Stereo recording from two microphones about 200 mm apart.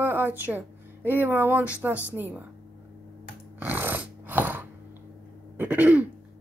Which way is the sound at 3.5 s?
10° right (ahead or behind).